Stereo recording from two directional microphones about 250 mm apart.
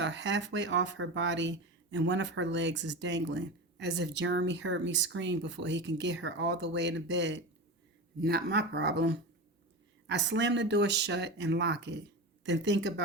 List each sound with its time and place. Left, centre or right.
0.0 s speech: right